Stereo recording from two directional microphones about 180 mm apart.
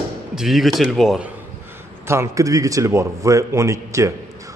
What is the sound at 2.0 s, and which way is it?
Speech, 15° right (ahead or behind).